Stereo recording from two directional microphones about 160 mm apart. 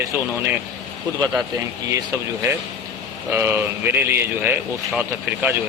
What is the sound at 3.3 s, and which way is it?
Speech, 15° right (ahead or behind).